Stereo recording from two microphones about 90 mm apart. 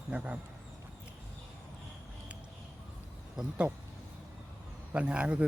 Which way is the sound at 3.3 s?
10° right (ahead or behind).